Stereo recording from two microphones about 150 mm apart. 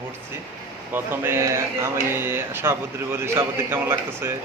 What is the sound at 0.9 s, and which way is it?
Speech, 15° right (ahead or behind).